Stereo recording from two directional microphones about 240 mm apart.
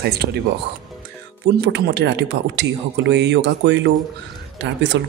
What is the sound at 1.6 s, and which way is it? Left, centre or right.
Speech, right.